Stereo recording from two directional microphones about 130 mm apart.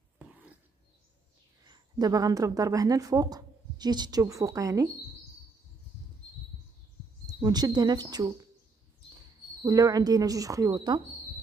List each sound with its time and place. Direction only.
1.7 s speech: 30° right (ahead or behind)
7.3 s speech: 30° right (ahead or behind)
9.7 s speech: 30° right (ahead or behind)